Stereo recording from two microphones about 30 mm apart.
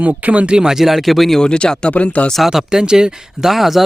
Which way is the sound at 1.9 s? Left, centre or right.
Left.